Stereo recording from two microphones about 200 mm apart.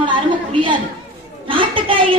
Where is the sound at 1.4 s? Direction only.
25° right (ahead or behind).